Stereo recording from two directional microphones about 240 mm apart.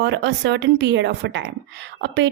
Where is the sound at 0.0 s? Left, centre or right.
Right.